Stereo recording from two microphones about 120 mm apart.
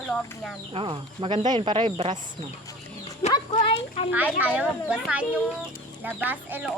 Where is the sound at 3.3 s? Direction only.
45° left (ahead or behind).